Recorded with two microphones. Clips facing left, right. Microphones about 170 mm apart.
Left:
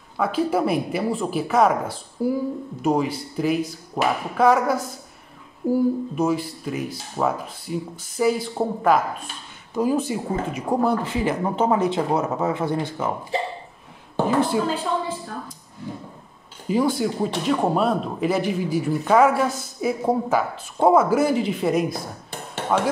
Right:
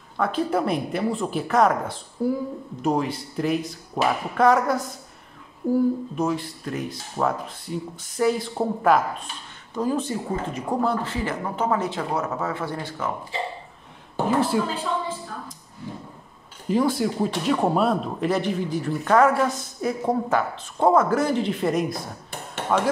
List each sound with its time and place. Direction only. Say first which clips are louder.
0.2 s speech: left 2 dB; 5° left (ahead or behind)
14.2 s speech: left 1 dB; centre (ahead or behind)
16.6 s speech: left 1 dB; centre (ahead or behind)